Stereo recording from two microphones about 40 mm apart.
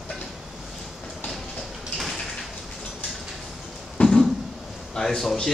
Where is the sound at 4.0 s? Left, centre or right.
Left.